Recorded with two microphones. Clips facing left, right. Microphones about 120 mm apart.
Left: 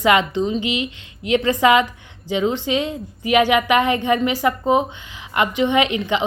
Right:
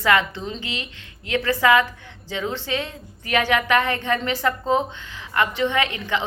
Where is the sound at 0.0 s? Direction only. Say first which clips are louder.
Left 4 dB; 20° left (ahead or behind).